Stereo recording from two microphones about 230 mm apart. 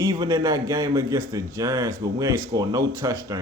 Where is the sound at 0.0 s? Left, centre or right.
Centre.